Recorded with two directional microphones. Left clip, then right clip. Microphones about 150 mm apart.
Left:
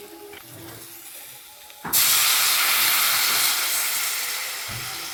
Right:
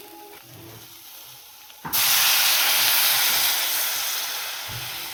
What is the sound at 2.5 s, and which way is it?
Steam, 15° right (ahead or behind).